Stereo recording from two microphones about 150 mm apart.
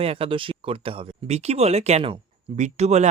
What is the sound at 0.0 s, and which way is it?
Speech, 40° right (ahead or behind).